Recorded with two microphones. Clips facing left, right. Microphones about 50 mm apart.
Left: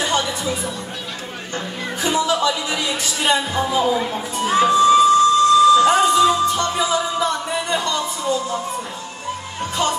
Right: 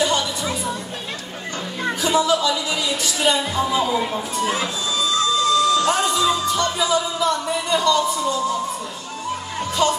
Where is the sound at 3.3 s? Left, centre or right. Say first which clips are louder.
Left 1 dB; left.